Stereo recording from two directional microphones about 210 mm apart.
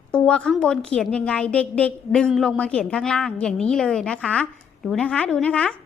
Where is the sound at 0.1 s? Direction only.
5° left (ahead or behind).